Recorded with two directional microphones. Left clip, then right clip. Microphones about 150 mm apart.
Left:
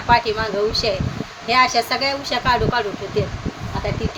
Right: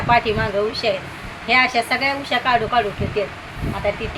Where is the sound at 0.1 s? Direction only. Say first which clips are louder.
Left 1 dB; 15° left (ahead or behind).